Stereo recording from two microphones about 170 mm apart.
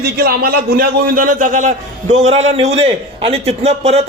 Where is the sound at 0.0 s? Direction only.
65° right (ahead or behind).